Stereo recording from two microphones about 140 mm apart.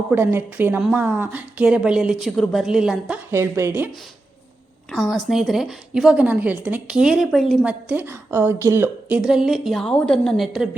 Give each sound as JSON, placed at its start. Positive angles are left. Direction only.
{"t": 0.1, "sound": "a woman's voice", "side_deg": -15}
{"t": 3.3, "sound": "a woman's voice", "side_deg": -20}
{"t": 4.9, "sound": "a woman's voice", "side_deg": 0}